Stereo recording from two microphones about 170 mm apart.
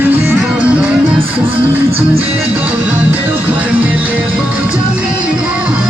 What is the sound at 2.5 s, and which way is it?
Music, 10° right (ahead or behind).